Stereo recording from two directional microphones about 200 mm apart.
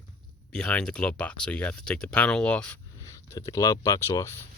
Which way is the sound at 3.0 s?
15° left (ahead or behind).